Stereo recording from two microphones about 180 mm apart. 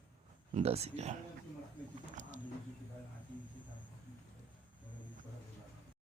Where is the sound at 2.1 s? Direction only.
40° right (ahead or behind).